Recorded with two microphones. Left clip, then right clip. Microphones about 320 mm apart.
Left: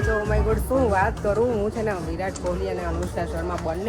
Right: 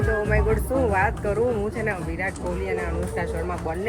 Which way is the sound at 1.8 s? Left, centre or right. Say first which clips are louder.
Even; centre.